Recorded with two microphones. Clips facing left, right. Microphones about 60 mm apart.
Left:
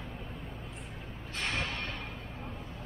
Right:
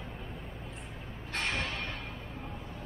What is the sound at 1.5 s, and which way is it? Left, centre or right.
Music, centre.